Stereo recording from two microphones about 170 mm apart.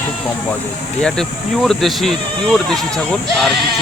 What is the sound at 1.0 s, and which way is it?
Speech, 5° left (ahead or behind).